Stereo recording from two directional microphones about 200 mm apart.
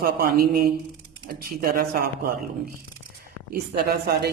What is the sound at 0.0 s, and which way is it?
Speech, 50° right (ahead or behind).